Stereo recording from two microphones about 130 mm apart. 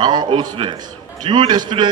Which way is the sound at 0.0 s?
35° right (ahead or behind).